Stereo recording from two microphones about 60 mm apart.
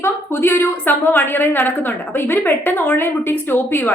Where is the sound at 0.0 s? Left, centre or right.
Left.